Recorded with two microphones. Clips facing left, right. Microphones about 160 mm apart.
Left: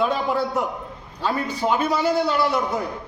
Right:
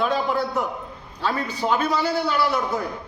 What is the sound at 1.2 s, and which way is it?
A man's voice, 15° left (ahead or behind).